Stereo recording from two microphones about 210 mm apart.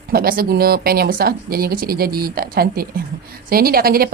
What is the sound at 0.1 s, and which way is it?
Speech, 45° right (ahead or behind).